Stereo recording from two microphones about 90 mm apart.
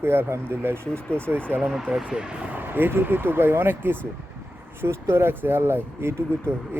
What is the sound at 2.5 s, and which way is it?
A man's voice, 20° right (ahead or behind).